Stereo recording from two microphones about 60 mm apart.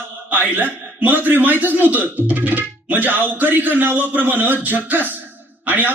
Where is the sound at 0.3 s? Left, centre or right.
Right.